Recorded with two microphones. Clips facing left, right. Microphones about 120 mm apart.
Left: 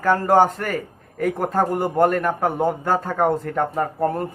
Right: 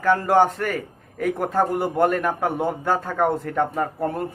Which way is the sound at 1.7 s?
45° left (ahead or behind).